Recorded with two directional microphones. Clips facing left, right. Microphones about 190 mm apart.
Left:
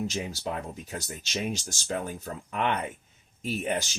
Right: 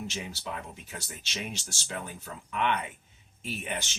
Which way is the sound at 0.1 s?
40° left (ahead or behind).